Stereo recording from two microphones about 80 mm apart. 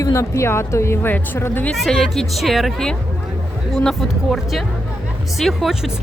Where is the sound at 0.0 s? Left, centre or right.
Left.